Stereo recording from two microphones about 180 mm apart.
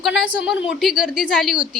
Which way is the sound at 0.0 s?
5° right (ahead or behind).